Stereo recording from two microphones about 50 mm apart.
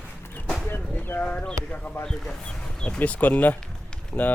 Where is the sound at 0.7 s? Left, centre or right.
Left.